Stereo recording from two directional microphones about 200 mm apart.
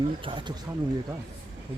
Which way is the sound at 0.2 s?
25° right (ahead or behind).